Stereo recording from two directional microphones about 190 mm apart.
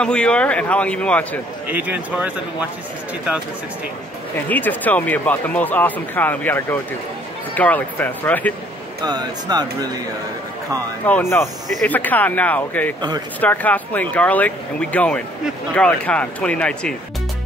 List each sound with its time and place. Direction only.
0.0 s speech: 5° left (ahead or behind)
1.7 s a man's voice: 10° right (ahead or behind)
4.4 s speech: 10° left (ahead or behind)
9.0 s speech: 20° right (ahead or behind)
11.1 s speech: 10° left (ahead or behind)